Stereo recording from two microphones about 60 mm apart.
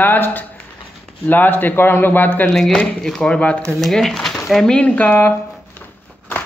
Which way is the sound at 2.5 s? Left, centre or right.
Centre.